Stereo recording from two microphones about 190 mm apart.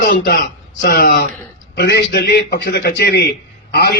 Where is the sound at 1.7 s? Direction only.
65° left (ahead or behind).